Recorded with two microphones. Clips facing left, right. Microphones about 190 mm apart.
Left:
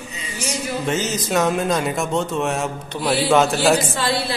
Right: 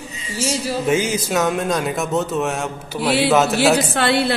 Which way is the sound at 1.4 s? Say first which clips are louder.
Left 1 dB; centre (ahead or behind).